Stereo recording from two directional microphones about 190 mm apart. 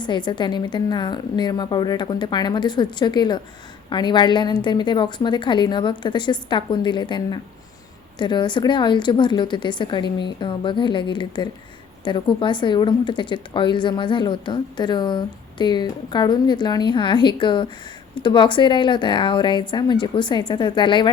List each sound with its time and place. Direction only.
0.0 s a woman's voice: 25° left (ahead or behind)